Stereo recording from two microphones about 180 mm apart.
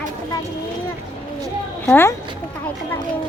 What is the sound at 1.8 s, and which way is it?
Speech, 10° left (ahead or behind).